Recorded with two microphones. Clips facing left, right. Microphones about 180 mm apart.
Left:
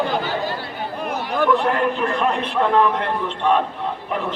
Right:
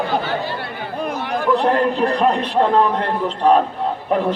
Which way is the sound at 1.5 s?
35° right (ahead or behind).